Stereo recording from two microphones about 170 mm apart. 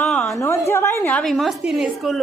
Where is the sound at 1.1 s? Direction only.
5° left (ahead or behind).